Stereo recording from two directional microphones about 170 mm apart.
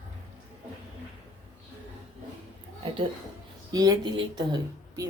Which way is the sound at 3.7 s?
25° right (ahead or behind).